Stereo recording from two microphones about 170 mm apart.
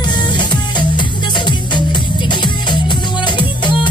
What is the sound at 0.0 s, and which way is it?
Music, 25° left (ahead or behind).